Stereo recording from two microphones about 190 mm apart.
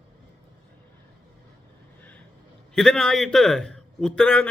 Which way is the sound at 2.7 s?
5° left (ahead or behind).